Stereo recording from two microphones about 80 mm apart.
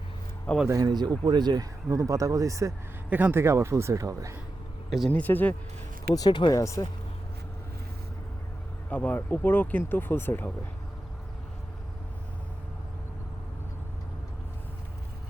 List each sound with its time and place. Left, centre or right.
0.5 s speech: centre
0.9 s speech: right
1.9 s speech: right
3.1 s speech: right
3.4 s speech: right
4.9 s speech: centre
5.1 s speech: left
6.1 s speech: left
6.5 s speech: left
8.9 s speech: centre